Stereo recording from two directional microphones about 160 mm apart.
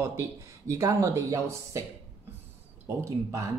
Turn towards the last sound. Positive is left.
turn(degrees=-20)  # may be behind; listen again after turning